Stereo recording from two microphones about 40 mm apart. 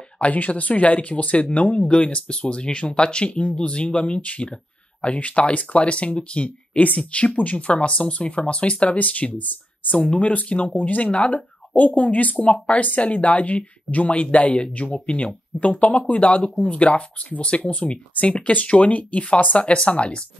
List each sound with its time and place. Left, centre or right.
0.2 s speech: left
3.3 s speech: left
3.5 s speech: left
9.9 s speech: left
10.2 s speech: left
11.1 s speech: left